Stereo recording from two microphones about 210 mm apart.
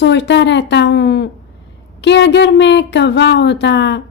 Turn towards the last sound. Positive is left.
turn(degrees=55)  # may be behind; listen again after turning